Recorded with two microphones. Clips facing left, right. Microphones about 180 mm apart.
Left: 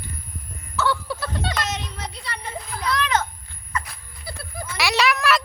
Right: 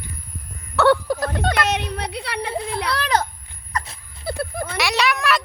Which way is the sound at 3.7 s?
40° right (ahead or behind).